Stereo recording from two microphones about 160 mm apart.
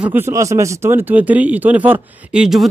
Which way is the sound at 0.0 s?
15° right (ahead or behind).